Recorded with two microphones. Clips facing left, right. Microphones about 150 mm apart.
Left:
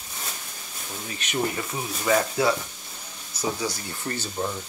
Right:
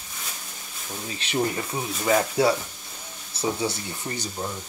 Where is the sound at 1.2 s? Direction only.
30° right (ahead or behind).